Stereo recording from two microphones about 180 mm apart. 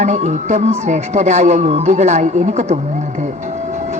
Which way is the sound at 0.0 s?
40° right (ahead or behind).